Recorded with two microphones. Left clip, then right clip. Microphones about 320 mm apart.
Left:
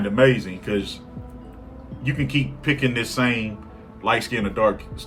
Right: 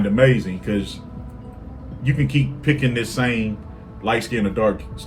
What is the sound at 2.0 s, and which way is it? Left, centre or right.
Speech, centre.